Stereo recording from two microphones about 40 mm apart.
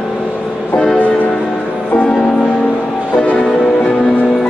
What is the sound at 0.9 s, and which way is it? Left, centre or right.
Music, left.